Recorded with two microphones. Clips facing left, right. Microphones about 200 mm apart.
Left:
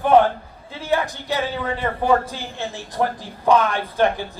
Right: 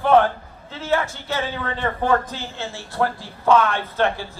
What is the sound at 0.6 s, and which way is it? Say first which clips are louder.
A man's voice: even; 15° left (ahead or behind).